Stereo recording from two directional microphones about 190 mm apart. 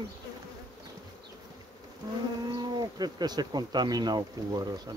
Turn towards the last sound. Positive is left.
turn(degrees=-20)  # may be behind; listen again after turning